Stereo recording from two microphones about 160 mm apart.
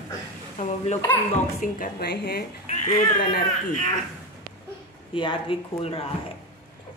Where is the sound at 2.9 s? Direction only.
60° left (ahead or behind).